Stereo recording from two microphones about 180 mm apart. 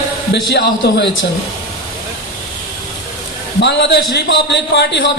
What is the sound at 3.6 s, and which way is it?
Speech, 70° left (ahead or behind).